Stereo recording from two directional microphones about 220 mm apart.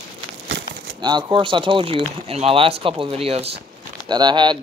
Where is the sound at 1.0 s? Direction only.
20° right (ahead or behind).